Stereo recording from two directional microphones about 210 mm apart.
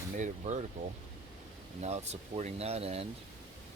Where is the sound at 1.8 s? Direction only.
30° right (ahead or behind).